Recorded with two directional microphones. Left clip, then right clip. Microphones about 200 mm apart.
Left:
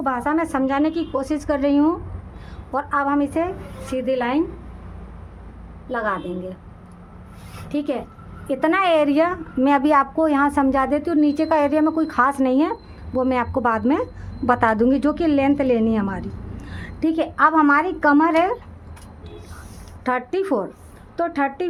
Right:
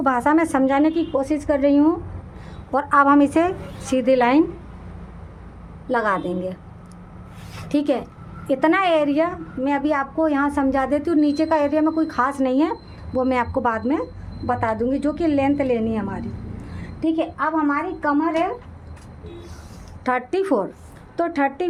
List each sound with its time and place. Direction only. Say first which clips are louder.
0.0 s a woman's voice: right 3 dB; 15° right (ahead or behind); by 2.0 s centre (ahead or behind)
2.7 s a woman's voice: right 5 dB; 20° right (ahead or behind)
5.9 s a woman's voice: right 3 dB; 25° right (ahead or behind)
7.7 s a woman's voice: right 4 dB; 25° right (ahead or behind)
8.4 s a woman's voice: even; centre (ahead or behind); by 14.1 s 20° left (ahead or behind)
14.4 s a woman's voice: left 4 dB; 35° left (ahead or behind); by 16.2 s 15° left (ahead or behind)
16.7 s a woman's voice: left 1 dB; 30° left (ahead or behind); by 18.5 s 50° left (ahead or behind)
20.1 s a woman's voice: right 1 dB; centre (ahead or behind)